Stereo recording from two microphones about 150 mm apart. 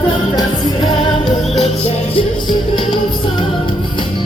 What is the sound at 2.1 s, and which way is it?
Music, 30° left (ahead or behind).